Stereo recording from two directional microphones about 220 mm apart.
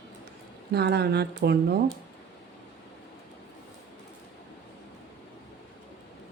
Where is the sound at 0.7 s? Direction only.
45° right (ahead or behind).